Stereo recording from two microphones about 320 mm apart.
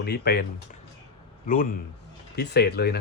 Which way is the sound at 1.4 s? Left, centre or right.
Left.